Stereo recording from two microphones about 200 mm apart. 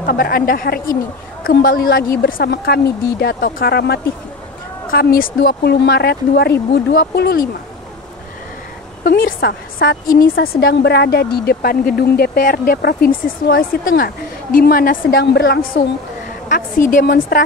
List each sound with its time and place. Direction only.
0.0 s a woman's voice: 50° left (ahead or behind)
9.0 s a woman's voice: 50° left (ahead or behind)